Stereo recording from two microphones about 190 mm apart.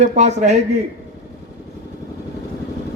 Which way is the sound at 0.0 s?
40° right (ahead or behind).